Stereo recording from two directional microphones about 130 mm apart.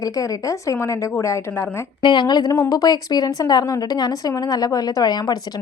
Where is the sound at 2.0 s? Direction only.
35° left (ahead or behind).